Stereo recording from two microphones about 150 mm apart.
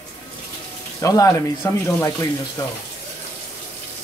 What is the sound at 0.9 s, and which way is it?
Speech, 20° left (ahead or behind).